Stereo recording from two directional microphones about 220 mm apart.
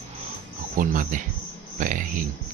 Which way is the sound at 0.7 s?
40° right (ahead or behind).